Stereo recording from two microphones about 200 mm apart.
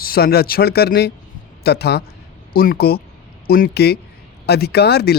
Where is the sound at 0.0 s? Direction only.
50° left (ahead or behind).